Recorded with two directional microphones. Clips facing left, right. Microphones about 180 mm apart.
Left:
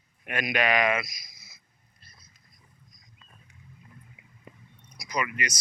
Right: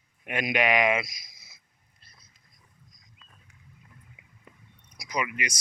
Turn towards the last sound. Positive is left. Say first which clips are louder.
# even
turn(degrees=-20)  # may be behind; listen again after turning